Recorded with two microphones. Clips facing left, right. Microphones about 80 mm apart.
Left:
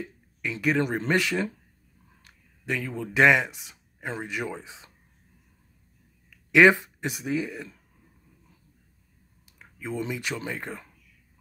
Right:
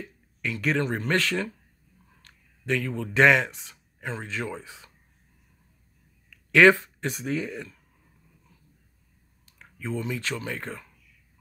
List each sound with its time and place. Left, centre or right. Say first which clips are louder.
0.0 s speech: even; centre
6.3 s speech: even; centre
9.5 s a sound: right 1 dB; centre
9.9 s speech: even; centre